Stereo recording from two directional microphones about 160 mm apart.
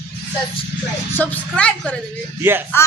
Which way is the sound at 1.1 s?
10° left (ahead or behind).